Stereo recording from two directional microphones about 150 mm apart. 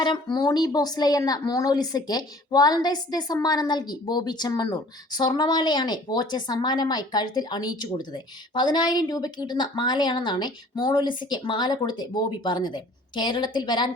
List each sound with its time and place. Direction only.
0.0 s speech: 30° left (ahead or behind)